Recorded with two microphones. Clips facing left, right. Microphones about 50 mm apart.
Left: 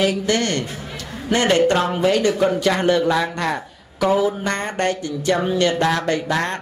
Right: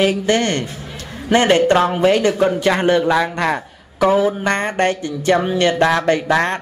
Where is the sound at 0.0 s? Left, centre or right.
Right.